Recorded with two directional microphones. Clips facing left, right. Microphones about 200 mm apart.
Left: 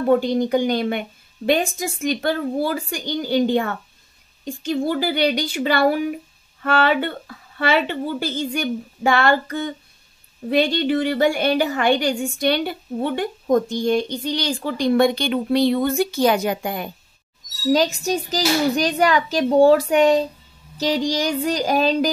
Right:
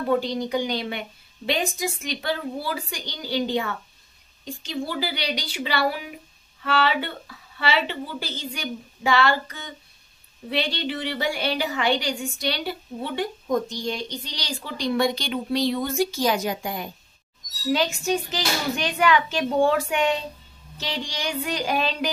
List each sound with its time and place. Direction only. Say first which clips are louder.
0.0 s a woman's voice: left 6 dB; 50° left (ahead or behind)
17.6 s a woman's voice: left 5 dB; 40° left (ahead or behind)